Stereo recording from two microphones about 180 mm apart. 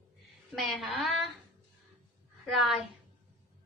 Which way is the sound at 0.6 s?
Centre (ahead or behind).